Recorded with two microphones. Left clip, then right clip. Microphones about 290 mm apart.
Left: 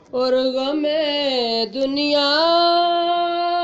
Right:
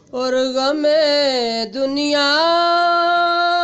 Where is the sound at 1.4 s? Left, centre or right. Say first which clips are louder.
Right 1 dB; right.